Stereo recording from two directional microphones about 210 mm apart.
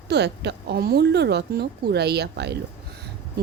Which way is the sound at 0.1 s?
55° right (ahead or behind).